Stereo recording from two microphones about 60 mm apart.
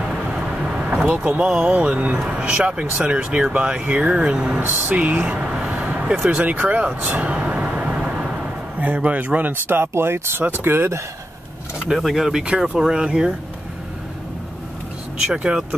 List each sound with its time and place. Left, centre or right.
0.0 s vehicle: centre
1.0 s speech: right
4.6 s speech: right
6.3 s vehicle: right
8.7 s speech: right
11.9 s speech: centre
12.4 s speech: right
15.2 s speech: centre